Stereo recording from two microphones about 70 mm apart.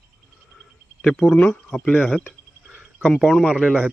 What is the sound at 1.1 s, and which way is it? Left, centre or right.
Speech, centre.